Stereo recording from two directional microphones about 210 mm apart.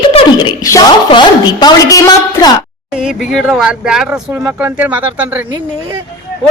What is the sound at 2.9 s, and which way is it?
Speech, 5° right (ahead or behind).